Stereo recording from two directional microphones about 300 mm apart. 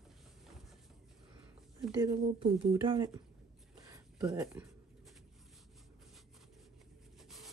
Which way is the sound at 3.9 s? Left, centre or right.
Centre.